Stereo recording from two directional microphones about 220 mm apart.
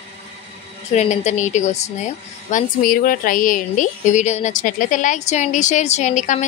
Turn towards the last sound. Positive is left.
turn(degrees=35)  # may be behind; listen again after turning